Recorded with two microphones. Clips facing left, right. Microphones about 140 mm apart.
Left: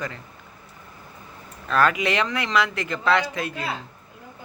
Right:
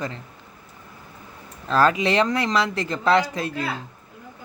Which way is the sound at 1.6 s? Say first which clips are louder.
Right 2 dB; 30° right (ahead or behind).